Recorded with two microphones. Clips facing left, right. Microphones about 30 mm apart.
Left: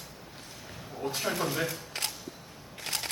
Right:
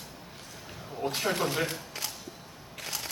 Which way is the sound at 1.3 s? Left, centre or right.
Right.